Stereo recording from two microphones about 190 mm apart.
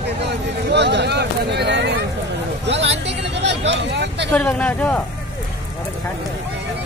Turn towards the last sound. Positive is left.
turn(degrees=10)  # may be behind; listen again after turning